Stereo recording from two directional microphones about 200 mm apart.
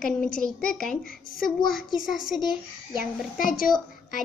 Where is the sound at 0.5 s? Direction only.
5° left (ahead or behind).